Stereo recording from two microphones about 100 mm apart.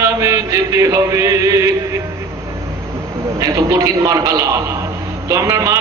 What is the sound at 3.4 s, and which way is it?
Chant, 35° right (ahead or behind).